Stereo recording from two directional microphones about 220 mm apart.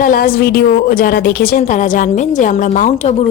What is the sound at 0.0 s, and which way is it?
A woman's voice, 40° left (ahead or behind).